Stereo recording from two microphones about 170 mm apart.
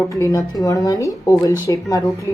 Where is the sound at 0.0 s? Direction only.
15° left (ahead or behind).